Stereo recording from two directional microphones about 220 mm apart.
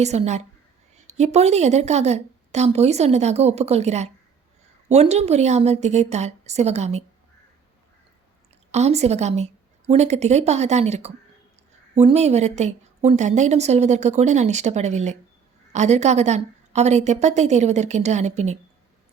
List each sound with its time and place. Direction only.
0.0 s a woman's voice: 30° right (ahead or behind)
8.7 s a woman's voice: 30° right (ahead or behind)